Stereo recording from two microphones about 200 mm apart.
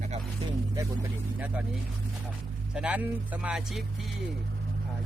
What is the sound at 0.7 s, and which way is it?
Speech, 10° right (ahead or behind).